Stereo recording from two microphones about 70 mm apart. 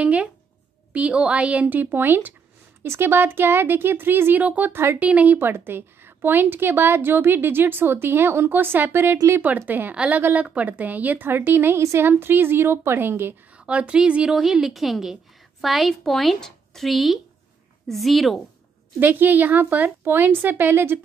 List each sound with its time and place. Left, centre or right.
0.0 s a woman's voice: centre; by 13.3 s right
13.6 s speech: centre
14.5 s speech: centre
18.9 s a woman's voice: right